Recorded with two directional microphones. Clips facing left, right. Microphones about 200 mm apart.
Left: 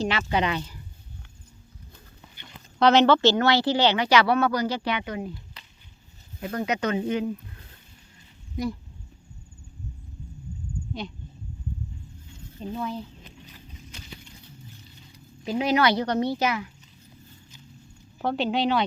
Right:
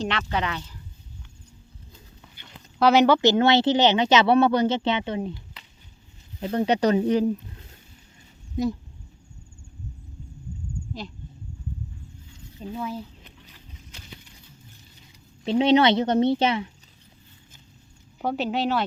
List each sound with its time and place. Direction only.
0.0 s speech: 5° left (ahead or behind)
2.7 s speech: 5° right (ahead or behind); by 5.3 s 25° right (ahead or behind)
6.4 s speech: 25° right (ahead or behind)
12.5 s speech: 5° right (ahead or behind)
15.4 s speech: 30° right (ahead or behind)
18.2 s speech: 10° right (ahead or behind)